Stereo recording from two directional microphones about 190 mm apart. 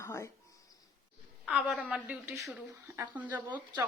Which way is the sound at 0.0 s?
15° left (ahead or behind).